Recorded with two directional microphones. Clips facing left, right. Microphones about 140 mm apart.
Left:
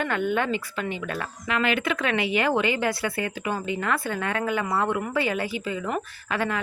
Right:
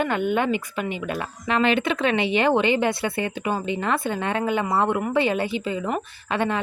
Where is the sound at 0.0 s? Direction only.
20° right (ahead or behind).